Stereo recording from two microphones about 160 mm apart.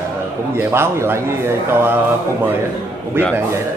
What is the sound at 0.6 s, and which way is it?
A man's voice, 15° right (ahead or behind).